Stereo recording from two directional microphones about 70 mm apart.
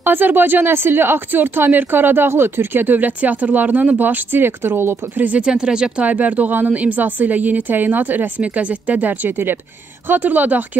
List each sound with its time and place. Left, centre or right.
0.0 s speech: right
5.3 s speech: centre
6.0 s speech: right